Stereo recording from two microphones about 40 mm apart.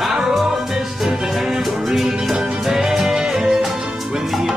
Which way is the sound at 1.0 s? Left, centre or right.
Centre.